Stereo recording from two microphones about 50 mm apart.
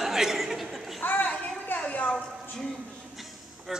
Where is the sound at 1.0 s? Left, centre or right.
Left.